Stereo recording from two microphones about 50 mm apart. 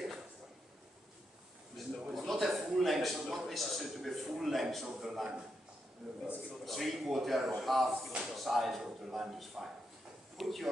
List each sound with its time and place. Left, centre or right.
1.8 s a sound: centre
4.8 s a man's voice: centre
7.9 s speech: right
8.4 s speech: centre